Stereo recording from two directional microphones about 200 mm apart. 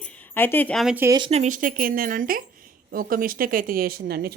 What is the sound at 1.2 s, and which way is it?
Speech, 35° right (ahead or behind).